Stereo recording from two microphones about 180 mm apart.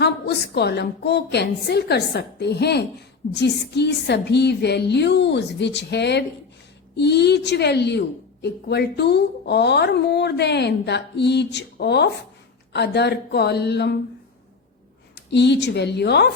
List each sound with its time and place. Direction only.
0.0 s a woman's voice: 65° left (ahead or behind)
15.1 s a woman's voice: 75° left (ahead or behind)